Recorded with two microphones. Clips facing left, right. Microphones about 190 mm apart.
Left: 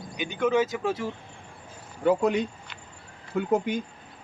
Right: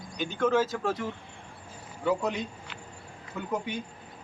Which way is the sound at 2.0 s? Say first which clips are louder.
Left 6 dB; 55° left (ahead or behind).